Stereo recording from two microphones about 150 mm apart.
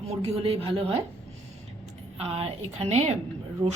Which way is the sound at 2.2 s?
40° right (ahead or behind).